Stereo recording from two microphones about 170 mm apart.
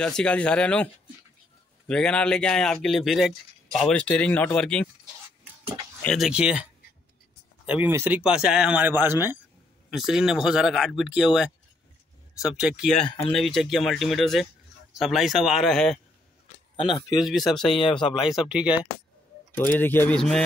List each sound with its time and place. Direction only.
0.0 s speech: 5° left (ahead or behind)
1.9 s speech: 5° left (ahead or behind)
6.0 s speech: centre (ahead or behind)
9.8 s speech: centre (ahead or behind)
16.7 s speech: 30° left (ahead or behind)
17.2 s speech: centre (ahead or behind)
19.5 s speech: 10° left (ahead or behind)